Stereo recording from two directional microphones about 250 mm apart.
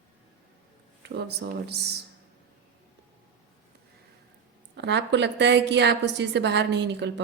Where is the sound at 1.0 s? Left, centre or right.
Right.